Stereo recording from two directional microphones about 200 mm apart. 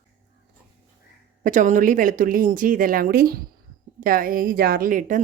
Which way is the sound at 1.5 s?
40° right (ahead or behind).